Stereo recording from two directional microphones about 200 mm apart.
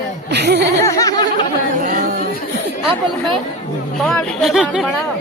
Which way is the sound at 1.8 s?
40° right (ahead or behind).